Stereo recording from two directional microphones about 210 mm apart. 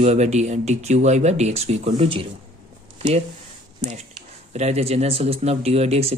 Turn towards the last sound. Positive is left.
turn(degrees=-30)  # may be behind; listen again after turning